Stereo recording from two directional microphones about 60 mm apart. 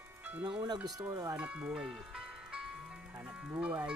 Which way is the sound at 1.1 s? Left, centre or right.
Right.